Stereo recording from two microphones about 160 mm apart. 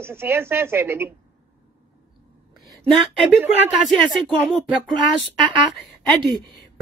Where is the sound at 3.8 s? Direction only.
5° left (ahead or behind).